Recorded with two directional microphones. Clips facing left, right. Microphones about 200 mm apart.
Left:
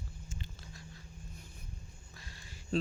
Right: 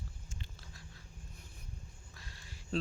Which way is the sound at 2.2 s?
Centre (ahead or behind).